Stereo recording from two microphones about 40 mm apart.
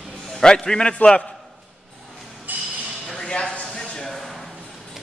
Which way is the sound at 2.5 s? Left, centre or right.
Right.